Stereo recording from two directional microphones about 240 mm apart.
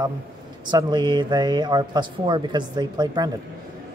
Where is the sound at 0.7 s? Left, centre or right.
Centre.